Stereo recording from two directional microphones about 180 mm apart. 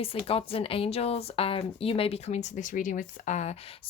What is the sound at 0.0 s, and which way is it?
Speech, 30° left (ahead or behind).